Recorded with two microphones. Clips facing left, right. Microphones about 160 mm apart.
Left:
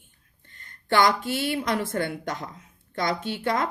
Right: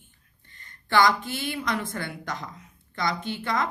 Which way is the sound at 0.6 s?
50° left (ahead or behind).